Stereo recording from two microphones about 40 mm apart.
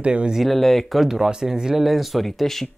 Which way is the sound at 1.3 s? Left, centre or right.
Centre.